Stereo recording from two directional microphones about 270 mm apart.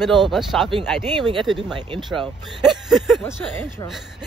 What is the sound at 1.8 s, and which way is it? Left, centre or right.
Speech, centre.